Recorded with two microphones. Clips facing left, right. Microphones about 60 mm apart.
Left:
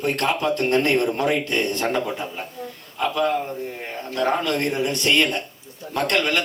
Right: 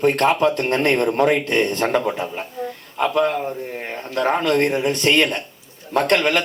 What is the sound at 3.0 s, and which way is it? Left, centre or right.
A man's voice, right.